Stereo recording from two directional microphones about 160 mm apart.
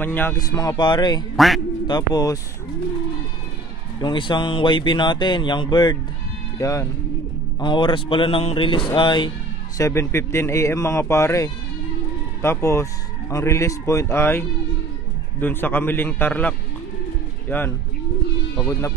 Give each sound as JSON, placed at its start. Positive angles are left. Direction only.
{"t": 0.0, "sound": "speech", "side_deg": 10}
{"t": 1.3, "sound": "speech", "side_deg": 0}
{"t": 1.9, "sound": "speech", "side_deg": 25}
{"t": 4.0, "sound": "speech", "side_deg": 30}
{"t": 7.6, "sound": "a man's voice", "side_deg": 30}
{"t": 9.8, "sound": "speech", "side_deg": 20}
{"t": 15.4, "sound": "speech", "side_deg": 15}